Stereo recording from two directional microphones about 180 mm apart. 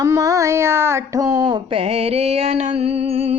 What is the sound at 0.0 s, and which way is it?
Speech, 20° right (ahead or behind).